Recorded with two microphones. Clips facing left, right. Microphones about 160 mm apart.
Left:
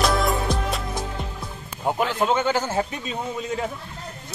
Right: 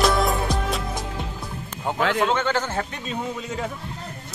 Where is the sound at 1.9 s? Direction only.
10° left (ahead or behind).